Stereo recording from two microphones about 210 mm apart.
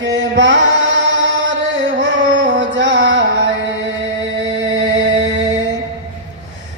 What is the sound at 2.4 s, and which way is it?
Music, 60° right (ahead or behind).